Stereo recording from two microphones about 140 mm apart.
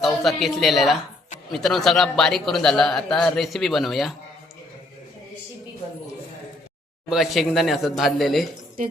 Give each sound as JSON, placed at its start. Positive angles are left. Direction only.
{"t": 0.0, "sound": "a man's voice", "side_deg": 0}
{"t": 7.1, "sound": "a man's voice", "side_deg": 0}